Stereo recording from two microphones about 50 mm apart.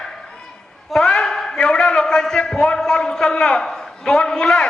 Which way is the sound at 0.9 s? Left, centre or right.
Centre.